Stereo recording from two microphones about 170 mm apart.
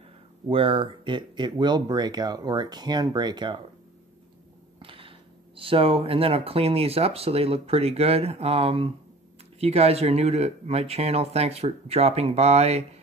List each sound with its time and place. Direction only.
0.5 s speech: 30° right (ahead or behind)
4.7 s a sound: 30° right (ahead or behind)
5.6 s speech: 30° right (ahead or behind)